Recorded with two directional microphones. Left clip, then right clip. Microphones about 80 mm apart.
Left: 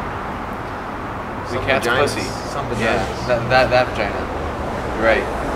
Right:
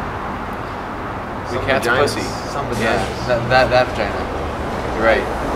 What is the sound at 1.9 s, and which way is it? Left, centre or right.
Speech, centre.